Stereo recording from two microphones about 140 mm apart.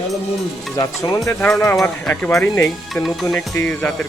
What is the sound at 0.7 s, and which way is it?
Music, 25° left (ahead or behind).